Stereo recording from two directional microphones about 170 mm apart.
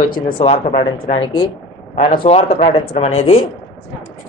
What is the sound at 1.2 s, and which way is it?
Speech, 25° left (ahead or behind).